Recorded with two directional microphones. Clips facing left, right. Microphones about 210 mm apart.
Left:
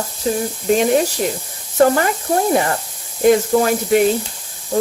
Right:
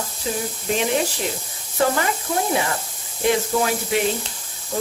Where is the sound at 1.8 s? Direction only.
45° left (ahead or behind).